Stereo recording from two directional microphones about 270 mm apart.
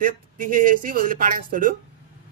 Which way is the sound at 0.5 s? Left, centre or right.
Right.